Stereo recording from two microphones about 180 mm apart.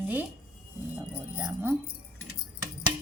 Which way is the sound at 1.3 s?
10° right (ahead or behind).